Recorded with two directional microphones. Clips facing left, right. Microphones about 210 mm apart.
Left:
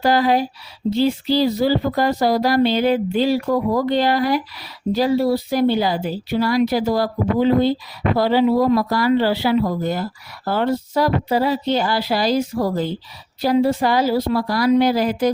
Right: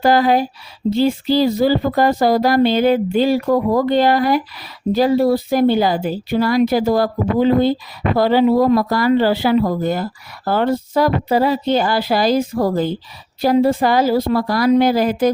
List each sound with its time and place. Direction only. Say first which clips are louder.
0.0 s speech: right 3 dB; 50° right (ahead or behind)